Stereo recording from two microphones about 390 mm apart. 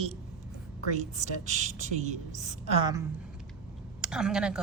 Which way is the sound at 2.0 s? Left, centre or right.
Centre.